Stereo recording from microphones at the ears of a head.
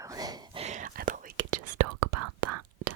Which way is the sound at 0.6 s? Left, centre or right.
Right.